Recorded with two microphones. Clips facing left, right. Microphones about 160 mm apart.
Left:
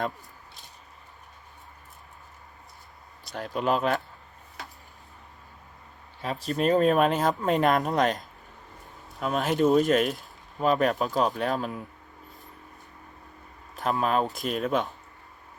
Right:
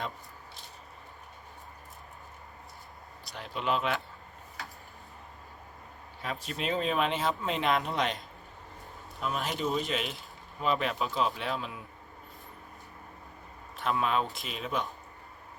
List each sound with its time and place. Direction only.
3.3 s speech: 45° left (ahead or behind)
6.2 s speech: 40° left (ahead or behind)
9.2 s speech: 50° left (ahead or behind)
13.8 s speech: 40° left (ahead or behind)